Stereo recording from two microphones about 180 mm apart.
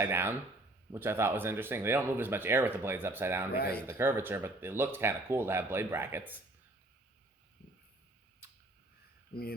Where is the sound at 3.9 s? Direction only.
15° right (ahead or behind).